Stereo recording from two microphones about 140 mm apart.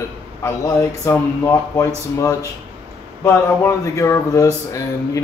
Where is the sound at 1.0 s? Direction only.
20° left (ahead or behind).